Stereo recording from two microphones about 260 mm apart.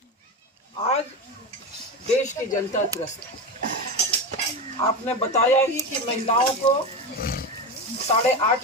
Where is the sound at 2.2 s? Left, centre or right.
Left.